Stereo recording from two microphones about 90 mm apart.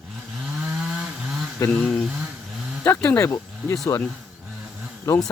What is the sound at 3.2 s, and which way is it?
Speech, 30° left (ahead or behind).